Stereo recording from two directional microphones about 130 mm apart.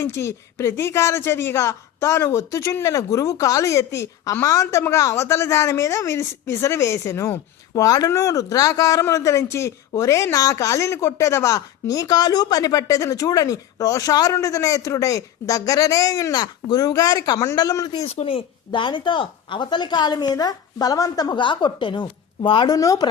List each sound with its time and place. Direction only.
0.0 s speech: 20° left (ahead or behind)
18.0 s speech: 55° left (ahead or behind); by 23.0 s 30° left (ahead or behind)